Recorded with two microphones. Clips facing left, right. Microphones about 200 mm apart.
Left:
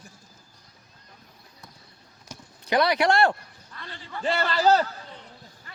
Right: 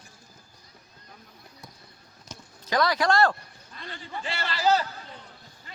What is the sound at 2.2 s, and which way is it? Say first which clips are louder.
Clip-clop: left 1 dB; 20° left (ahead or behind).